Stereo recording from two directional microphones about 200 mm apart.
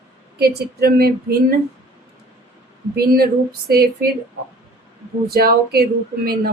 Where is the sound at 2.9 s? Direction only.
50° right (ahead or behind).